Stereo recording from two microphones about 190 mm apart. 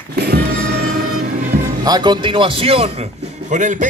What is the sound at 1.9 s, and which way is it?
A man's voice, 25° right (ahead or behind).